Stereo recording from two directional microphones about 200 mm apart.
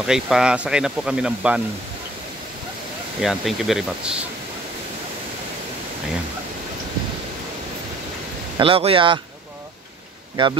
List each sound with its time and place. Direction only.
0.0 s speech: 5° right (ahead or behind)
3.2 s speech: centre (ahead or behind)
8.5 s speech: 25° right (ahead or behind)
10.3 s speech: 20° right (ahead or behind)